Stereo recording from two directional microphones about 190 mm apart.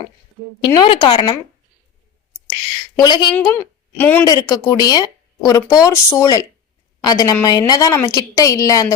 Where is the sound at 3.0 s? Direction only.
25° left (ahead or behind).